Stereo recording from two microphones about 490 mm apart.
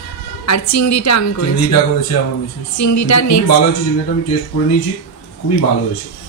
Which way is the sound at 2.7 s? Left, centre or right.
Left.